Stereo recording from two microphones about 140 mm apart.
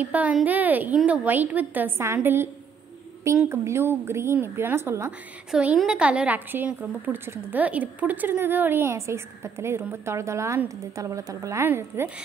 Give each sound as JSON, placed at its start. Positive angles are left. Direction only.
{"t": 0.0, "sound": "a woman's voice", "side_deg": -10}
{"t": 5.5, "sound": "a woman's voice", "side_deg": -5}